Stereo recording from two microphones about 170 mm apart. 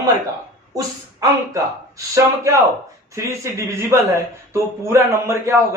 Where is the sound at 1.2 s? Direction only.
20° right (ahead or behind).